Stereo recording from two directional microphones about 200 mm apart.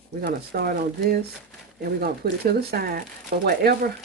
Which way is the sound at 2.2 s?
55° right (ahead or behind).